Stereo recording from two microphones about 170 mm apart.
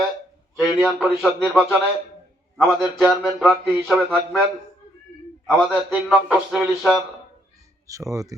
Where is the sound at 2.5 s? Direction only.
Centre (ahead or behind).